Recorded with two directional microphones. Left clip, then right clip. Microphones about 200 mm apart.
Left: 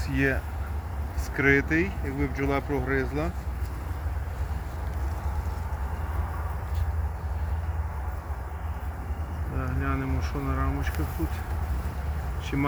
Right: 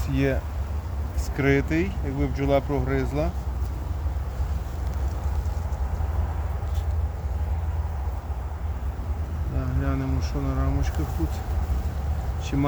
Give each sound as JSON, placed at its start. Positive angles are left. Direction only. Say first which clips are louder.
{"t": 0.1, "sound": "speech", "louder": "right 1 dB", "side_deg": -30}
{"t": 1.4, "sound": "speech", "louder": "left 1 dB", "side_deg": -40}
{"t": 9.8, "sound": "speech", "louder": "right 1 dB", "side_deg": -20}
{"t": 12.5, "sound": "speech", "louder": "right 2 dB", "side_deg": -15}